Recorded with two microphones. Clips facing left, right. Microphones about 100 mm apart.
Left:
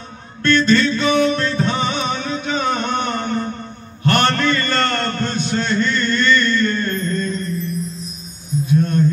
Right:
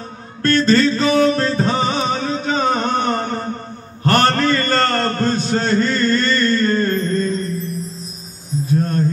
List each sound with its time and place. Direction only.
0.4 s music: 40° right (ahead or behind)
4.0 s a sound: 40° right (ahead or behind)
8.5 s music: 35° right (ahead or behind)